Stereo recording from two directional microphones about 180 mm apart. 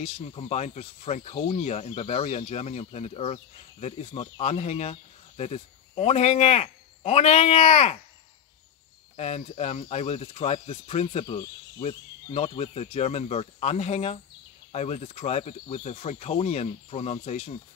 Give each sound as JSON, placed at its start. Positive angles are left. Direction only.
{"t": 0.0, "sound": "speech", "side_deg": 35}
{"t": 9.1, "sound": "speech", "side_deg": 40}
{"t": 12.5, "sound": "speech", "side_deg": 35}